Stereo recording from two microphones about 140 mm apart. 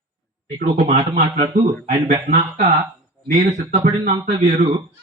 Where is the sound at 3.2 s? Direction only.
90° right.